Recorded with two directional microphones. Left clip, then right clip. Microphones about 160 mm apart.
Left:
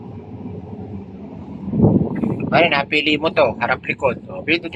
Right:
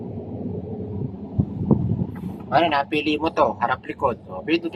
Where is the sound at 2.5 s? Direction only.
10° right (ahead or behind).